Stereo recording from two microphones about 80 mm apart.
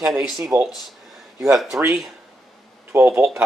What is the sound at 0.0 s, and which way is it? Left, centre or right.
Speech, centre.